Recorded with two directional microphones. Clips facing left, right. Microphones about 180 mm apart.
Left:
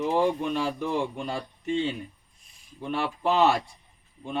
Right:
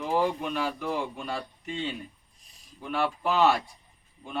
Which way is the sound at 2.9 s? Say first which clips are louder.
Left 1 dB; 25° left (ahead or behind).